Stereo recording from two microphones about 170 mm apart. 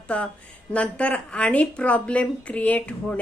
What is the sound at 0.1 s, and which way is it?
A woman's voice, 5° left (ahead or behind).